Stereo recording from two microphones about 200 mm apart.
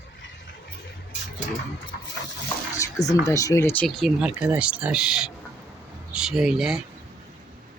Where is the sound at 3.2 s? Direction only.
15° left (ahead or behind); by 6.8 s centre (ahead or behind).